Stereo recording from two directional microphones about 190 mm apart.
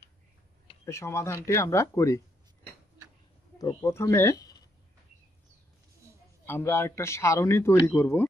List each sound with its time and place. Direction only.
0.8 s speech: 15° left (ahead or behind)
3.5 s speech: 15° left (ahead or behind)
6.4 s speech: 10° left (ahead or behind)